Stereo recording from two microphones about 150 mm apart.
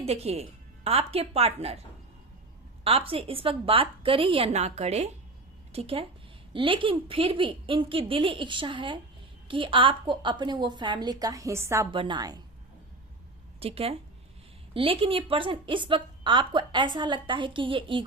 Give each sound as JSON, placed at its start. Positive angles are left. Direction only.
{"t": 0.0, "sound": "speech", "side_deg": -45}
{"t": 2.8, "sound": "speech", "side_deg": -40}
{"t": 11.9, "sound": "speech", "side_deg": -35}
{"t": 13.6, "sound": "speech", "side_deg": -40}